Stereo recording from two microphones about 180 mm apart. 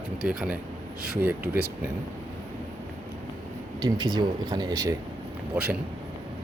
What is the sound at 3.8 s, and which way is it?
Speech, 20° right (ahead or behind).